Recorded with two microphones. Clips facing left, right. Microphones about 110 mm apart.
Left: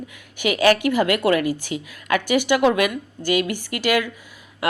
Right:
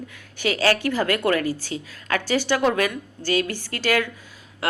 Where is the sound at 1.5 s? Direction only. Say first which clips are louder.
Left 3 dB; 15° left (ahead or behind).